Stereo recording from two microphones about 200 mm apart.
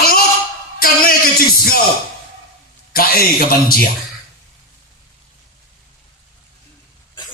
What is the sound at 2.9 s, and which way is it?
Speech, 45° left (ahead or behind).